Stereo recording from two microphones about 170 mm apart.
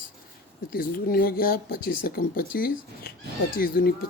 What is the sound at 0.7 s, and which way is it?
Speech, 60° left (ahead or behind).